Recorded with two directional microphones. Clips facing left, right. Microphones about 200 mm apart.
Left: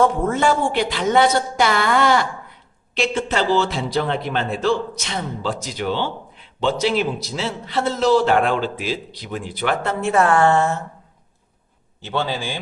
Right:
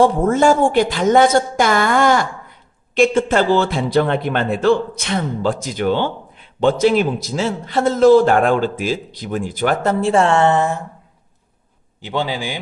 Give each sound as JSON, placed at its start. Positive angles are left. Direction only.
{"t": 0.3, "sound": "a man's voice", "side_deg": -45}
{"t": 12.0, "sound": "a man's voice", "side_deg": -15}